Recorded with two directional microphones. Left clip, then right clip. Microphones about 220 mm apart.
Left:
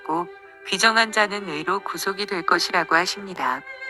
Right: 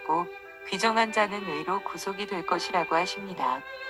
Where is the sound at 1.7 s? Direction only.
30° left (ahead or behind).